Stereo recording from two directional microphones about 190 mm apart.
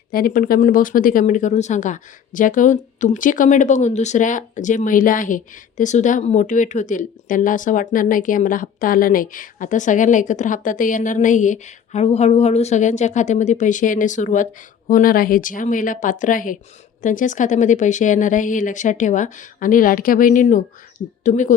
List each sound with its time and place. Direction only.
0.1 s speech: 50° left (ahead or behind)